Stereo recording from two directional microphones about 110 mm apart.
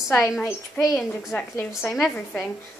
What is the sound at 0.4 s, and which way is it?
Speech, 25° left (ahead or behind).